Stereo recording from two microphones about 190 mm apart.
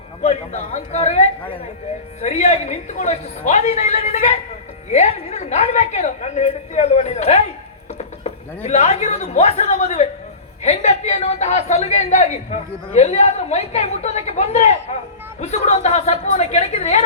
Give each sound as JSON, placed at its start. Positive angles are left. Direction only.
{"t": 0.2, "sound": "a woman's voice", "side_deg": 40}